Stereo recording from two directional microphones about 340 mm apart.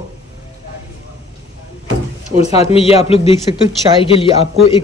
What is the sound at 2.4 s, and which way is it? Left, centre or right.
Speech, centre.